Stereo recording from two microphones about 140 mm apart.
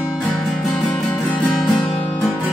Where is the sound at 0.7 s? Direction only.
5° left (ahead or behind).